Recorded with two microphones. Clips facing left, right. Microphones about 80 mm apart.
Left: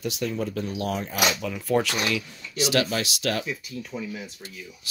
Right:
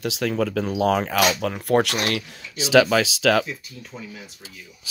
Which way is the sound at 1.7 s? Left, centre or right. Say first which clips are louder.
Right 3 dB; right.